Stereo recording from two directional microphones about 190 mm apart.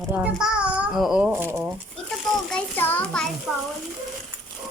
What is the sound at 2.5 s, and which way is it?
Speech, 10° left (ahead or behind).